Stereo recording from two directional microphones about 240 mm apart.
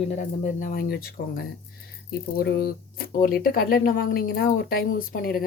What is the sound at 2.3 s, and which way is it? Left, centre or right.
A woman's voice, left.